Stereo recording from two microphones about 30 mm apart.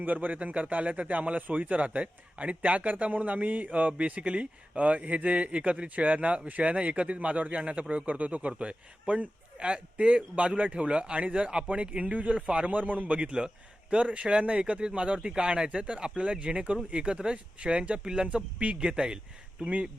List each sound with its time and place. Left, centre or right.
0.0 s speech: right
0.3 s a man's voice: right
4.2 s a man's voice: right
12.7 s speech: right
13.4 s a man's voice: right
13.9 s speech: right